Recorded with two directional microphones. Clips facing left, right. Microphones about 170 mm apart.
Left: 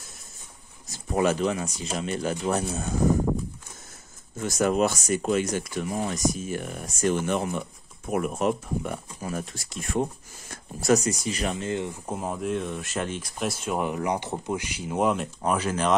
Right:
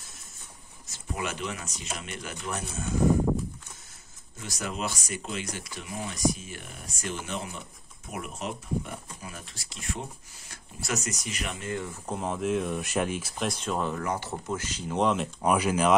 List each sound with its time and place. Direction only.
0.8 s speech: 35° left (ahead or behind)
4.4 s speech: 50° left (ahead or behind)
10.5 s speech: 40° left (ahead or behind); by 12.0 s 20° left (ahead or behind)
12.1 s speech: 5° left (ahead or behind)
13.4 s speech: 5° left (ahead or behind)
15.4 s speech: 10° right (ahead or behind)